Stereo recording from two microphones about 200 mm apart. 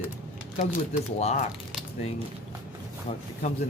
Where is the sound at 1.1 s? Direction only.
35° left (ahead or behind).